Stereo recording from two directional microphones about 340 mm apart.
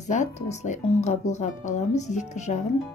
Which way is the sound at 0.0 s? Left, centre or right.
Left.